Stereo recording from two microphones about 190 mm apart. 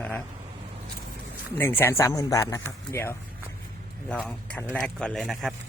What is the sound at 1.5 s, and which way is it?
Speech, 10° left (ahead or behind).